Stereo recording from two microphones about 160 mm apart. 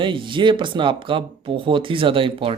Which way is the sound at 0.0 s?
30° right (ahead or behind).